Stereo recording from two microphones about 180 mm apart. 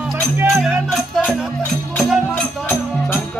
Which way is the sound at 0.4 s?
5° right (ahead or behind).